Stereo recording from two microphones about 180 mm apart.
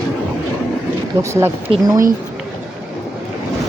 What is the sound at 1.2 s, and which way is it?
Speech, 15° right (ahead or behind).